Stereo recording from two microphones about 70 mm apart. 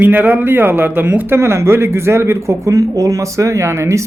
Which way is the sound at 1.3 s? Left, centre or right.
Right.